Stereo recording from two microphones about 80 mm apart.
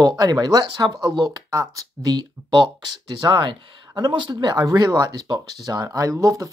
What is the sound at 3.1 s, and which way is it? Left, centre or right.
Speech, right.